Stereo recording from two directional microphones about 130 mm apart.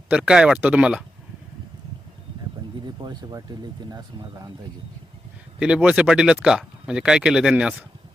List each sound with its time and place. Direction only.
0.1 s speech: 5° right (ahead or behind)
2.8 s a sound: 35° right (ahead or behind)
3.8 s speech: 30° right (ahead or behind)
5.5 s speech: 10° right (ahead or behind)